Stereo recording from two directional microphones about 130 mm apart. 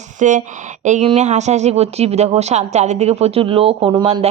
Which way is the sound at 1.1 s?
60° right (ahead or behind).